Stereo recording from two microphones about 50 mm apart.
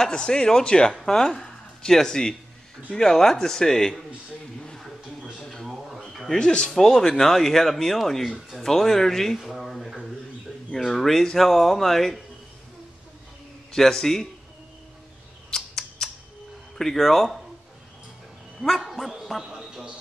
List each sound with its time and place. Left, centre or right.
0.0 s speech: centre
5.4 s a sound: centre
5.7 s a sound: centre
6.3 s speech: centre
13.7 s speech: centre
15.5 s bird: centre
16.7 s speech: centre
18.6 s a man's voice: centre